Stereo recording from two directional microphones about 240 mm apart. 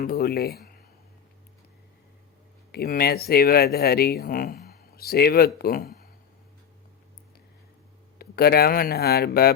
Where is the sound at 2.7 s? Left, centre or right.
Left.